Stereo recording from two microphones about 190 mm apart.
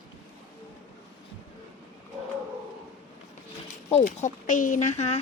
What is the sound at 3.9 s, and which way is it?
Speech, 40° left (ahead or behind).